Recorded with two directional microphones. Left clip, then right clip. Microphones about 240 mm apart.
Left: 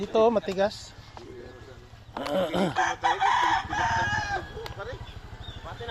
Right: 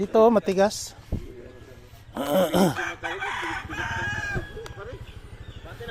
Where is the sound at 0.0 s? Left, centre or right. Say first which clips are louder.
Right 4 dB; right.